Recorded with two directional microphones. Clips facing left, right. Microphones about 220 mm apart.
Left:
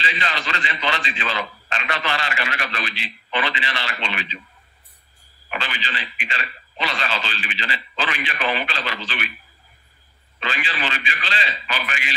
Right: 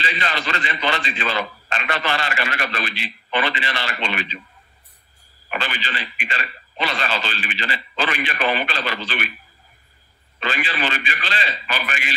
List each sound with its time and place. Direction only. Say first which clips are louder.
0.0 s a man's voice: right 2 dB; 50° right (ahead or behind)
5.5 s a man's voice: right 2 dB; 50° right (ahead or behind)
10.4 s a man's voice: right 3 dB; 55° right (ahead or behind)